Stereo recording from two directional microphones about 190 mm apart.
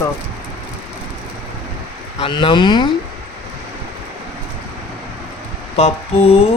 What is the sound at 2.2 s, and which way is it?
Speech, 25° left (ahead or behind).